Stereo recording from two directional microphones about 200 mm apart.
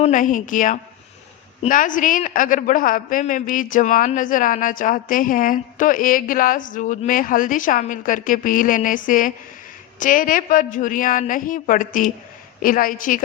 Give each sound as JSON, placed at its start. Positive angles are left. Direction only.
{"t": 0.0, "sound": "a woman's voice", "side_deg": 40}